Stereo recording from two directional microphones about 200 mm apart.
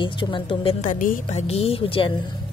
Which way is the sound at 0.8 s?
40° left (ahead or behind).